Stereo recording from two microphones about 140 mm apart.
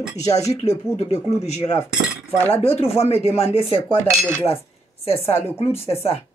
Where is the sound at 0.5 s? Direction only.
50° left (ahead or behind).